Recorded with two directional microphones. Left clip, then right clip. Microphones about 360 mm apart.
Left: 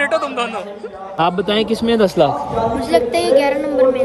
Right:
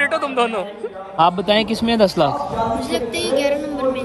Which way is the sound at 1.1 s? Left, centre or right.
Centre.